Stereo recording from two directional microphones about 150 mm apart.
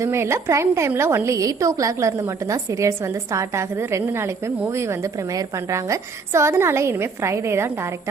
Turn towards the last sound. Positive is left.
turn(degrees=-15)  # may be behind; listen again after turning